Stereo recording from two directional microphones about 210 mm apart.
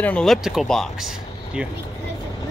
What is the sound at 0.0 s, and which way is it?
Speech, 5° left (ahead or behind).